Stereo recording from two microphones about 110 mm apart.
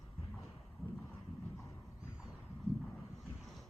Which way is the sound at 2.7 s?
60° right (ahead or behind).